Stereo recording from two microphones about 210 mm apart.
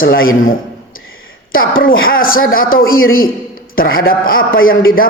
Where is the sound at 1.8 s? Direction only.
45° left (ahead or behind).